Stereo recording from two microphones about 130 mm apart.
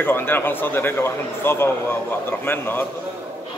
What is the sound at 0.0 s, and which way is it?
A man's voice, 15° left (ahead or behind).